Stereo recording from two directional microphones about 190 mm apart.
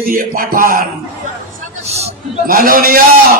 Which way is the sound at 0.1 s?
50° right (ahead or behind).